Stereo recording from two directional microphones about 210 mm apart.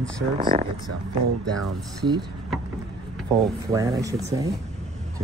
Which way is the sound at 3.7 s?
15° right (ahead or behind).